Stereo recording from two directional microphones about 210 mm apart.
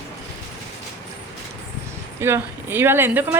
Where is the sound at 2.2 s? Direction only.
10° right (ahead or behind).